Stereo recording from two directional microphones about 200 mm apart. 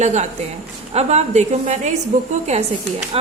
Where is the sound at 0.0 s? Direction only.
35° right (ahead or behind).